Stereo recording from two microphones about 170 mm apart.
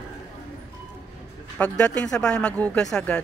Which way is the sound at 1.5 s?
10° left (ahead or behind).